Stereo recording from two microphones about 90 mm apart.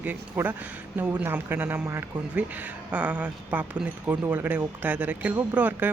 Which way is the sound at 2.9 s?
15° right (ahead or behind).